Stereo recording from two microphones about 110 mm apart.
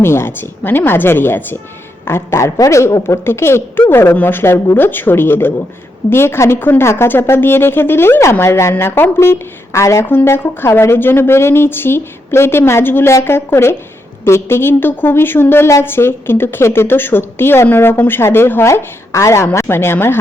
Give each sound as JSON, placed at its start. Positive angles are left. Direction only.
{"t": 0.0, "sound": "speech", "side_deg": 20}